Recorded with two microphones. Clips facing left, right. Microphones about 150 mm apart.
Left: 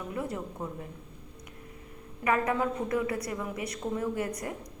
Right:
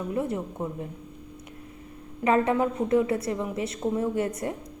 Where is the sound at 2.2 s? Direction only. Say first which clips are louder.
Right 5 dB; 25° right (ahead or behind).